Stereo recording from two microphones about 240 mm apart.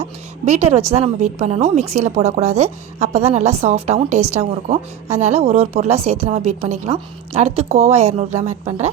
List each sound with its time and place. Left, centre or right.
0.0 s a woman's voice: right